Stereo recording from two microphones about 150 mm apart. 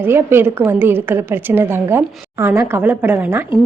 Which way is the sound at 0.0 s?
15° right (ahead or behind).